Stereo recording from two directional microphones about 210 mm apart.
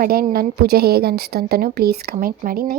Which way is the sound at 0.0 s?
45° right (ahead or behind).